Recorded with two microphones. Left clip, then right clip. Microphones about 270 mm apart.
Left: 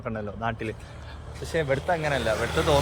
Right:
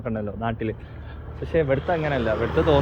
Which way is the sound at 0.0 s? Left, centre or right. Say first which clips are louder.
Right 2 dB; centre.